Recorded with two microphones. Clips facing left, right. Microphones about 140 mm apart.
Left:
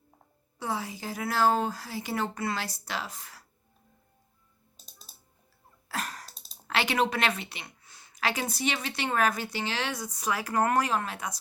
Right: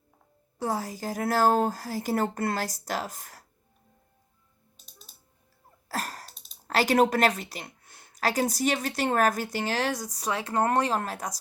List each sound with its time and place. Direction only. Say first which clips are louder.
0.6 s speech: right 3 dB; 40° right (ahead or behind)
4.9 s music: right 1 dB; 35° left (ahead or behind)
5.9 s a sound: right 2 dB; 40° right (ahead or behind)
6.3 s computer keyboard: left 2 dB; 35° left (ahead or behind)
6.7 s a woman's voice: right 5 dB; 40° right (ahead or behind)